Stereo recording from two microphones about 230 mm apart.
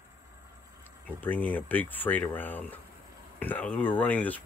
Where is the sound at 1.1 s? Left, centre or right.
Centre.